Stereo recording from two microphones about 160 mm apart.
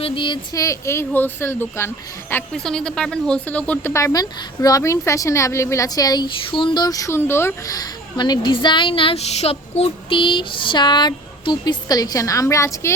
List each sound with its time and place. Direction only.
0.0 s speech: 30° left (ahead or behind); by 1.9 s 15° left (ahead or behind)
2.5 s speech: 5° left (ahead or behind)